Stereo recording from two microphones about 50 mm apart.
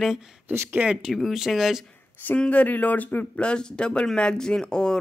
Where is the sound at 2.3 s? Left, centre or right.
Left.